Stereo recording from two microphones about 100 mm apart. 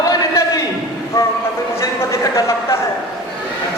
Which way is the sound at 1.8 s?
30° left (ahead or behind).